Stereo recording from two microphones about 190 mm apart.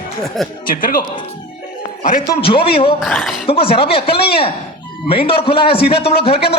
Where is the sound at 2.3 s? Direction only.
30° left (ahead or behind).